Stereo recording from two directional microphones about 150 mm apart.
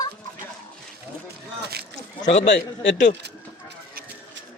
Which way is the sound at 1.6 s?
90° right.